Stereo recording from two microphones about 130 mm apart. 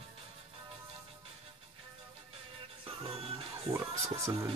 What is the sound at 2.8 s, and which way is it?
Music, 45° right (ahead or behind).